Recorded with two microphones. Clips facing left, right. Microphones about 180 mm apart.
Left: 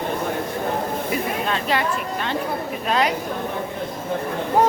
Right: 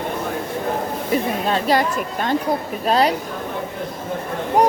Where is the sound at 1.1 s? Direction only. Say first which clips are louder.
Right 7 dB; 35° right (ahead or behind).